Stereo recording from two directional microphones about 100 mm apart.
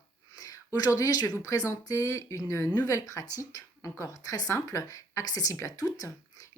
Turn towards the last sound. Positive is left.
turn(degrees=35)  # may be behind; listen again after turning